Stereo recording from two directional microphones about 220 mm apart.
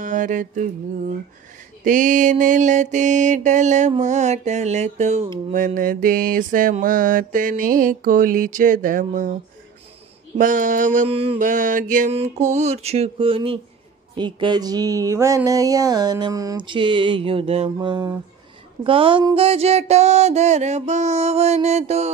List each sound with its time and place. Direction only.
0.0 s mantra: 35° right (ahead or behind)
1.9 s mantra: 35° right (ahead or behind)
10.3 s mantra: 35° right (ahead or behind)
14.1 s a sound: 20° right (ahead or behind)